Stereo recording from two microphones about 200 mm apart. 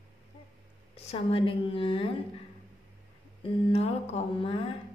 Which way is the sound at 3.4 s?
30° left (ahead or behind).